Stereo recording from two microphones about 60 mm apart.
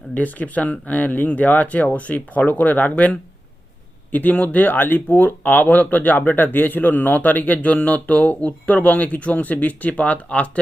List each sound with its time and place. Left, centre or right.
0.1 s speech: left